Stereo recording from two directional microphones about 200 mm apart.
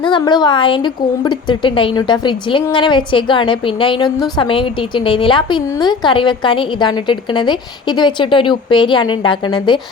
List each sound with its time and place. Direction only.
0.0 s a woman's voice: 25° left (ahead or behind)